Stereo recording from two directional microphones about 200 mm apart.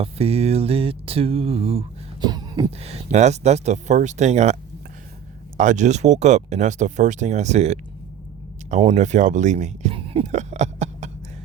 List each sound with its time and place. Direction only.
0.0 s mantra: 30° right (ahead or behind)
2.8 s speech: 35° right (ahead or behind)
5.5 s speech: 35° right (ahead or behind)
9.0 s speech: 35° right (ahead or behind)